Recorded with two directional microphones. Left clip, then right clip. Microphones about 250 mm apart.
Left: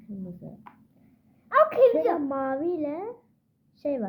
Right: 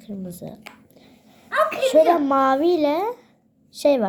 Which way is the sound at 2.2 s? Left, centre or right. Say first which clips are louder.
Right 10 dB; centre.